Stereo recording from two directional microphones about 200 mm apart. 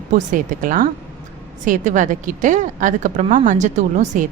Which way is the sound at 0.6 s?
45° right (ahead or behind).